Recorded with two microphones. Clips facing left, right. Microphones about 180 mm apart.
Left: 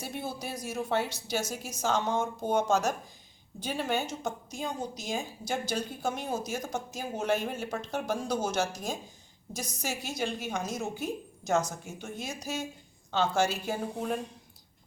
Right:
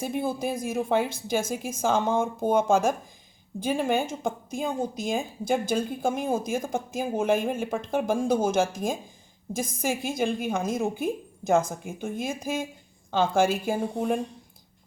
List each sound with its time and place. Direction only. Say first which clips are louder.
0.2 s a woman's voice: right 9 dB; 50° right (ahead or behind)